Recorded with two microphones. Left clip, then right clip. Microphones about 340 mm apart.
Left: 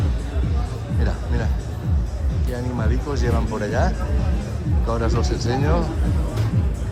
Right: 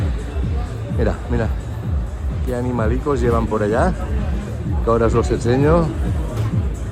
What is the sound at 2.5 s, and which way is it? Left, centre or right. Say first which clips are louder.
A man's voice: right 7 dB; right.